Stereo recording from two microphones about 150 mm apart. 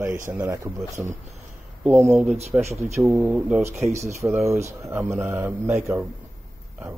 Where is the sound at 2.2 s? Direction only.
45° right (ahead or behind).